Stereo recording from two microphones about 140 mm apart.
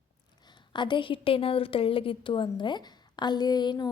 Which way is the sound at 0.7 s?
35° left (ahead or behind).